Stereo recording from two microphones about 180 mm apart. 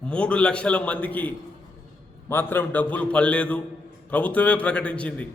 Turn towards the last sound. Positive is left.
turn(degrees=5)  # may be behind; listen again after turning